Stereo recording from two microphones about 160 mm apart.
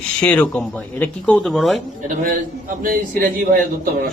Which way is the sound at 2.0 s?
60° right (ahead or behind).